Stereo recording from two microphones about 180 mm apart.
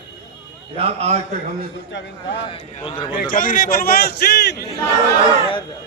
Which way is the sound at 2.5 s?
30° left (ahead or behind).